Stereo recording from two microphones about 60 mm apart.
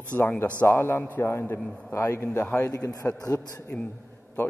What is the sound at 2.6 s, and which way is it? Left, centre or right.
Speech, left.